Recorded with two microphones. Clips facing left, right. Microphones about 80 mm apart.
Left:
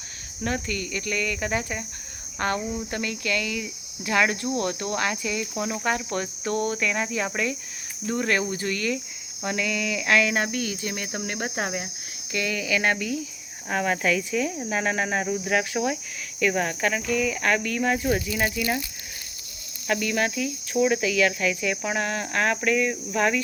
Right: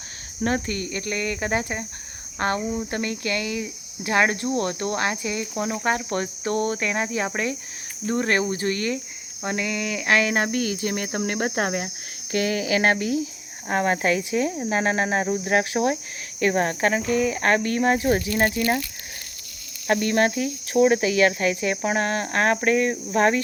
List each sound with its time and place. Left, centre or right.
0.4 s speech: right
6.4 s speech: right
8.6 s speech: right
9.4 s a sound: right
10.5 s speech: right
12.3 s speech: right
13.7 s speech: right
14.8 s speech: right
15.7 s speech: right
19.9 s speech: right